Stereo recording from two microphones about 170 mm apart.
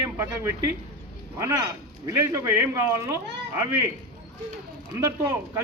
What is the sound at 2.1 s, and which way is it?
Speech, 15° right (ahead or behind).